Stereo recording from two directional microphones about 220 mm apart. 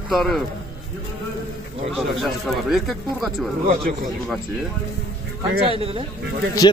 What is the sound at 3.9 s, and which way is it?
Speech, 40° right (ahead or behind).